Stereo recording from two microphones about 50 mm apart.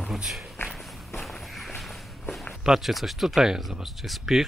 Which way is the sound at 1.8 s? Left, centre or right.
Centre.